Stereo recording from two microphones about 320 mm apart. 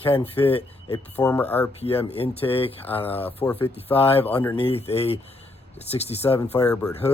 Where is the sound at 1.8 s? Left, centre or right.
Centre.